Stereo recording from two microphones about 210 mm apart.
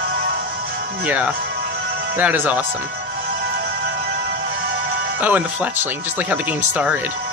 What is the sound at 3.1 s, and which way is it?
Music, 40° right (ahead or behind).